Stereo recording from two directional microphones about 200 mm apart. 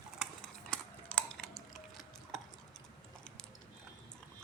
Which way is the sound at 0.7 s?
5° left (ahead or behind).